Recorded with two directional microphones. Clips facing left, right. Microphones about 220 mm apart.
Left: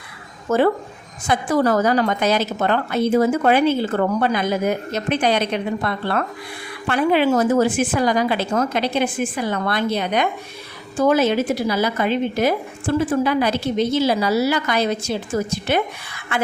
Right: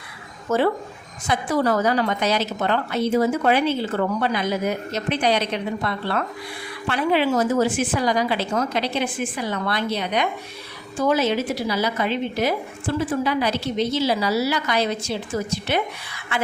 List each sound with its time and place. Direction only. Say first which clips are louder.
0.5 s a woman's voice: left 3 dB; 50° left (ahead or behind)